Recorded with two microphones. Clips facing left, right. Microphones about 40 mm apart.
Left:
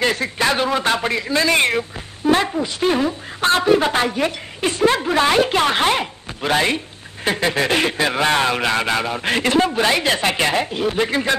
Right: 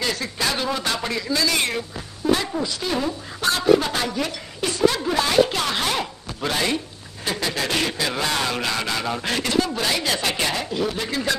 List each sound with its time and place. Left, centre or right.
0.0 s a woman's voice: left